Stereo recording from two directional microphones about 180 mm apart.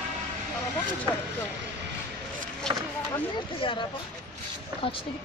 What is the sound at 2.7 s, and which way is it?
Speech, 5° left (ahead or behind).